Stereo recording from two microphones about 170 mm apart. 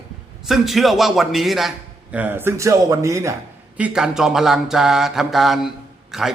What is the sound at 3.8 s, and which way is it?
Speech, 5° right (ahead or behind).